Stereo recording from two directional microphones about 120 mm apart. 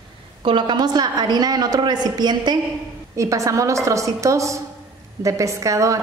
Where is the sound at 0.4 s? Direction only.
40° right (ahead or behind).